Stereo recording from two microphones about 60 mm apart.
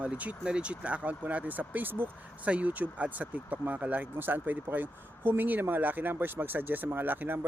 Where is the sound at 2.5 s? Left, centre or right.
Right.